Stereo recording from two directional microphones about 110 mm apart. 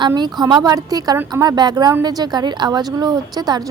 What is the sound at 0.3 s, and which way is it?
Speech, 40° right (ahead or behind).